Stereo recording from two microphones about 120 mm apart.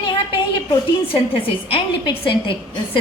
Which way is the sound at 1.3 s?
50° left (ahead or behind).